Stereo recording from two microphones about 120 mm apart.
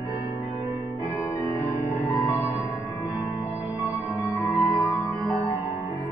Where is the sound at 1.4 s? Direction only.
25° left (ahead or behind).